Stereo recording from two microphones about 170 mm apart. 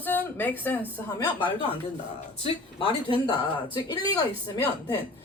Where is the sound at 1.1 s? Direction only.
30° left (ahead or behind).